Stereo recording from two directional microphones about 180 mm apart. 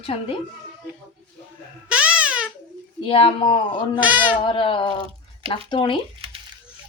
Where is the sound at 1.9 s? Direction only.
5° right (ahead or behind).